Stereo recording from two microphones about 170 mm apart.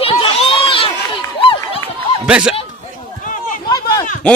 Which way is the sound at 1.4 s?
30° left (ahead or behind).